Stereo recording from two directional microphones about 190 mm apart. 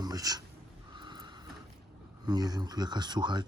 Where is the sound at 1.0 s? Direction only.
25° right (ahead or behind).